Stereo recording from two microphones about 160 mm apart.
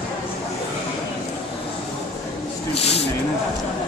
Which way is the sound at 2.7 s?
40° left (ahead or behind).